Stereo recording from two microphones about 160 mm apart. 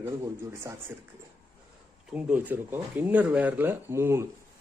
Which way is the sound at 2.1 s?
10° right (ahead or behind).